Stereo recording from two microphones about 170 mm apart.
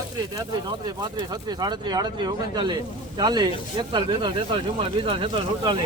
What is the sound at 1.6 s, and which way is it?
Speech, 25° right (ahead or behind).